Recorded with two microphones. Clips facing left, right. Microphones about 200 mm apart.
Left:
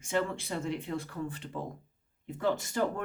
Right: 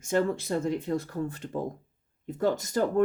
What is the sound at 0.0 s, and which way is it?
Speech, 40° right (ahead or behind).